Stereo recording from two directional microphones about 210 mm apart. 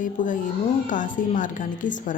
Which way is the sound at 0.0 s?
40° left (ahead or behind).